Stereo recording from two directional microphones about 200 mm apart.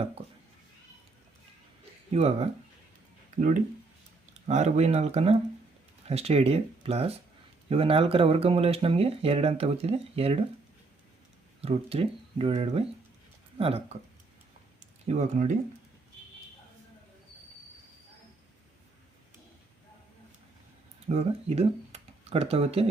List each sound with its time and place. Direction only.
2.1 s speech: 30° right (ahead or behind)
4.4 s speech: 35° right (ahead or behind)
11.6 s speech: 30° right (ahead or behind)
15.0 s speech: 35° right (ahead or behind)
21.1 s speech: 30° right (ahead or behind)